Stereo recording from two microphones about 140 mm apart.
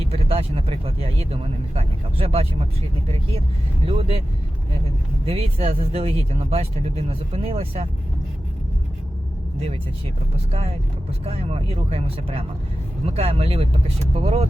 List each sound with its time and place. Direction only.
0.0 s speech: 45° right (ahead or behind)
3.8 s speech: 45° right (ahead or behind)
5.2 s speech: 45° right (ahead or behind)
10.5 s speech: 45° right (ahead or behind)